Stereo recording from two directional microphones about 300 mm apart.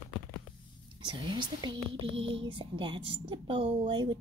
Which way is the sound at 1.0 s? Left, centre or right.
Centre.